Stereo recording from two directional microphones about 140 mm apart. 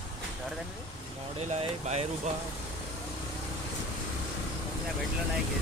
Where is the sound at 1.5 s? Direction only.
50° right (ahead or behind).